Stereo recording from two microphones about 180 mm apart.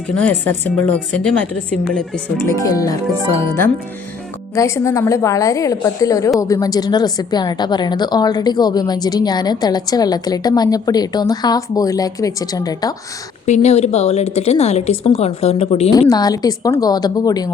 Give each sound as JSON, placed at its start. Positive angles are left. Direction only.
{"t": 0.1, "sound": "a woman's voice", "side_deg": 10}
{"t": 2.6, "sound": "a woman's voice", "side_deg": 20}
{"t": 4.5, "sound": "a woman's voice", "side_deg": 15}
{"t": 13.4, "sound": "speech", "side_deg": 40}
{"t": 16.0, "sound": "a woman's voice", "side_deg": 20}